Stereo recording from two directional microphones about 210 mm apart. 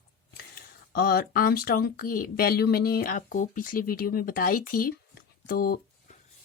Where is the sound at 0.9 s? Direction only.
45° left (ahead or behind).